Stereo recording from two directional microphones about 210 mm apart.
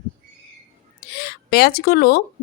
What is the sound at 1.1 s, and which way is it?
Speech, 45° left (ahead or behind).